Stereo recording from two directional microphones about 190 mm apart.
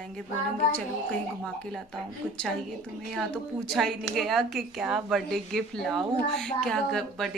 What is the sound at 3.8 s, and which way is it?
A woman's voice, centre (ahead or behind).